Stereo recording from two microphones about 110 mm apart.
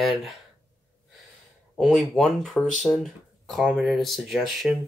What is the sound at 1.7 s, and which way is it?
Speech, centre (ahead or behind).